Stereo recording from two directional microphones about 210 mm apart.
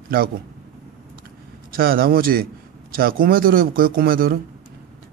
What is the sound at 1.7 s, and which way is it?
A man's voice, 45° right (ahead or behind).